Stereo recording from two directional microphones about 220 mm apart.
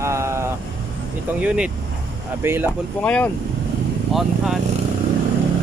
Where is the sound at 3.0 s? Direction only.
5° left (ahead or behind).